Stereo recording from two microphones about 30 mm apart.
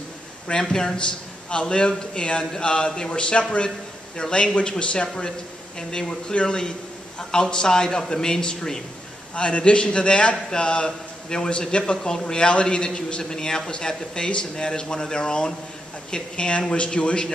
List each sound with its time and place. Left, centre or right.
0.5 s speech: left
0.9 s a man's voice: left
9.3 s a man's voice: left
11.7 s a man's voice: left